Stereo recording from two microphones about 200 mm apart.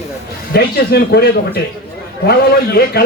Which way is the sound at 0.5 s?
50° left (ahead or behind).